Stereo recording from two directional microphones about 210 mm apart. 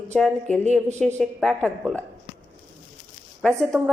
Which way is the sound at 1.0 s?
5° left (ahead or behind).